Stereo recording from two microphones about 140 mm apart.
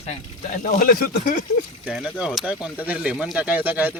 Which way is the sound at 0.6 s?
80° left.